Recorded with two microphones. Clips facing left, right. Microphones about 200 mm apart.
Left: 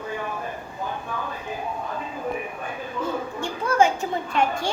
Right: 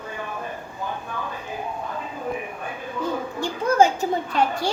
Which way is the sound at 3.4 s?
40° right (ahead or behind).